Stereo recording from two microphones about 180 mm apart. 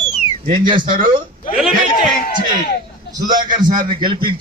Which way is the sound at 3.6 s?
45° right (ahead or behind).